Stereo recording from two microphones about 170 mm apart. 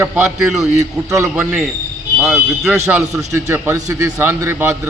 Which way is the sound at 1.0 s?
15° right (ahead or behind).